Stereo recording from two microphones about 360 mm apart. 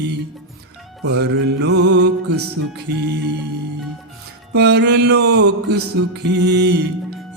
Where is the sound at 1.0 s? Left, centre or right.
Right.